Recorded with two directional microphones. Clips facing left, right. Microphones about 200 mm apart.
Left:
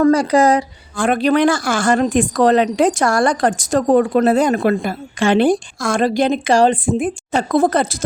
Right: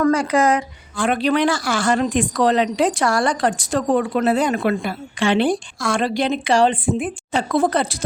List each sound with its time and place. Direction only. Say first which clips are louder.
0.0 s a woman's voice: left 4 dB; 35° left (ahead or behind)